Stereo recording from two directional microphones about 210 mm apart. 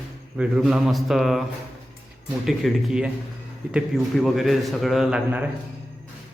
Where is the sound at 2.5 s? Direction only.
Centre (ahead or behind).